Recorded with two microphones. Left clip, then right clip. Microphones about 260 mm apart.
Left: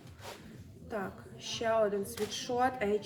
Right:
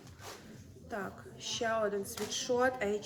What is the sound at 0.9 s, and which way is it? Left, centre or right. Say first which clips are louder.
A woman's voice: left 2 dB; centre.